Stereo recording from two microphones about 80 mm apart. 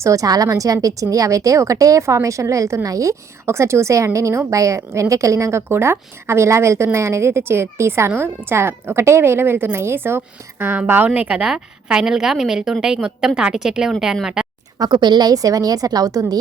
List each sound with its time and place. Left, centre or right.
0.0 s a woman's voice: right
11.3 s a woman's voice: centre
14.8 s a woman's voice: right